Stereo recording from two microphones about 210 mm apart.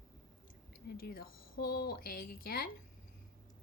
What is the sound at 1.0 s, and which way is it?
A woman's voice, 45° left (ahead or behind).